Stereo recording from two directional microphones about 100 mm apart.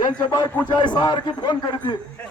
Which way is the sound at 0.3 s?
50° left (ahead or behind).